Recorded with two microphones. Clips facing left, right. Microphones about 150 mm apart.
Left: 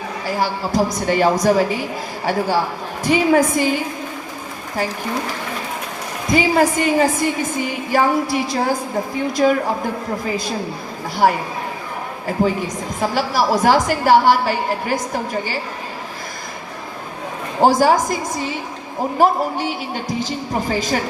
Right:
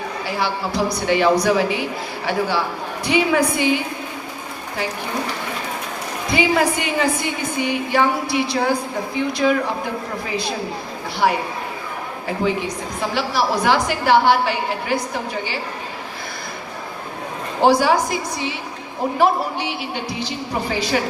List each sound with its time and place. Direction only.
0.3 s a man's voice: 40° left (ahead or behind)
6.3 s a woman's voice: 40° left (ahead or behind)
11.2 s a man's voice: 45° left (ahead or behind)
13.0 s a man's voice: 40° left (ahead or behind)
17.6 s a man's voice: 45° left (ahead or behind)